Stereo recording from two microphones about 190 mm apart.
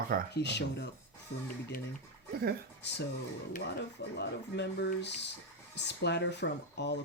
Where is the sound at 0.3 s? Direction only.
65° left (ahead or behind).